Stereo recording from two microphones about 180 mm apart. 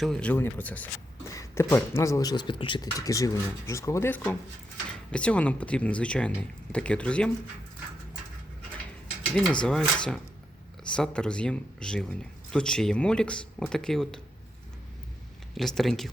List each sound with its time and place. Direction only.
0.0 s speech: 5° left (ahead or behind)
9.3 s speech: 5° left (ahead or behind)
15.5 s speech: centre (ahead or behind)